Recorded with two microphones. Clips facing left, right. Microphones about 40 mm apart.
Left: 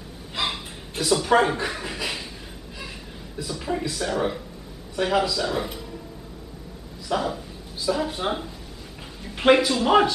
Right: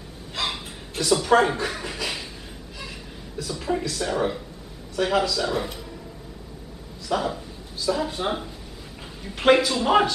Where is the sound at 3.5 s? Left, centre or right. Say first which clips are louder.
Right 1 dB; centre.